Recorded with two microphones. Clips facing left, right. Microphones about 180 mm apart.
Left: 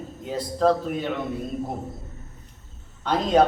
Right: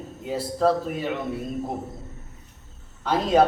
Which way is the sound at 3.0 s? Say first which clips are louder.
Even; 5° right (ahead or behind).